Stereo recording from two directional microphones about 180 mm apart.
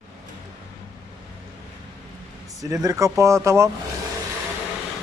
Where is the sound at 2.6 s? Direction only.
20° right (ahead or behind).